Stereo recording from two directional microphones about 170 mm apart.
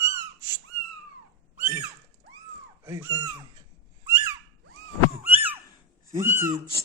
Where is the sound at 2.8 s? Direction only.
15° right (ahead or behind).